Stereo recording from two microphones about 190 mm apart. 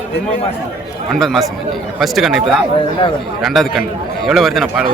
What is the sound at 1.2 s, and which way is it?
Speech, centre (ahead or behind).